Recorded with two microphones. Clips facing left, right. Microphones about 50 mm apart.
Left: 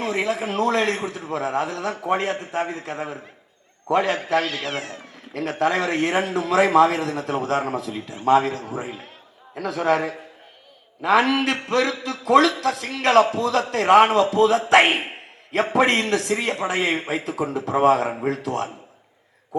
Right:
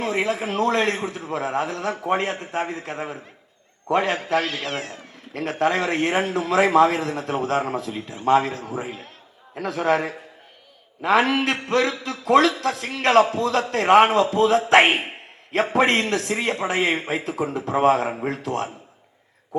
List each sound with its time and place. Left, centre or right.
0.0 s a man's voice: right
4.4 s speech: centre
5.3 s a man's voice: right
9.6 s a man's voice: right